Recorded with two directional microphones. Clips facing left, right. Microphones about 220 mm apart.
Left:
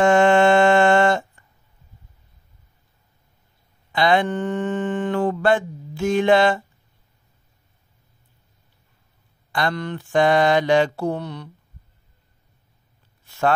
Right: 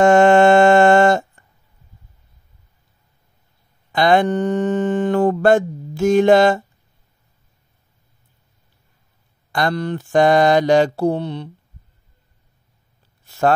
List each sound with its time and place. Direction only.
0.0 s a sound: 45° right (ahead or behind)
3.9 s mantra: 45° right (ahead or behind)
9.5 s mantra: 40° right (ahead or behind)